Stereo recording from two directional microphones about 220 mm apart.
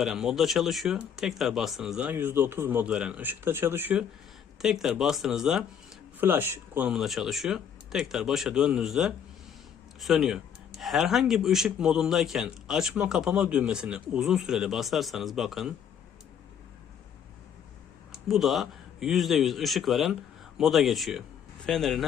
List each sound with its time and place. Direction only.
0.0 s speech: centre (ahead or behind)
18.3 s speech: centre (ahead or behind)